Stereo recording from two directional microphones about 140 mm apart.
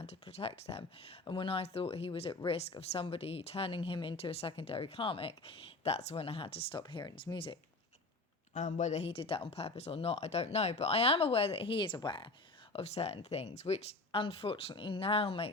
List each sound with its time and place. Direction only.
0.0 s speech: 50° left (ahead or behind)
8.5 s speech: 60° left (ahead or behind); by 12.3 s 35° left (ahead or behind)
12.7 s speech: 50° left (ahead or behind)